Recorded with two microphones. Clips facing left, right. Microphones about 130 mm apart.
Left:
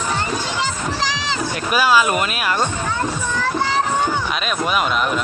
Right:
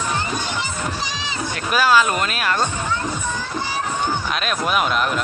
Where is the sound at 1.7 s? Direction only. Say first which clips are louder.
Left 1 dB; 10° left (ahead or behind).